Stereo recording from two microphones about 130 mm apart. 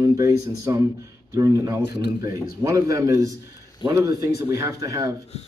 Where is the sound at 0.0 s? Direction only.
25° right (ahead or behind).